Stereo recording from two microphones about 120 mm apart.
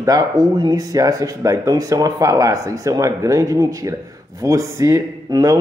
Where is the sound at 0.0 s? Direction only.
30° right (ahead or behind).